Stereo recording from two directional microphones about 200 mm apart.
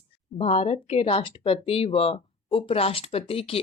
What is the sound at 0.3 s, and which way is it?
Speech, 30° left (ahead or behind).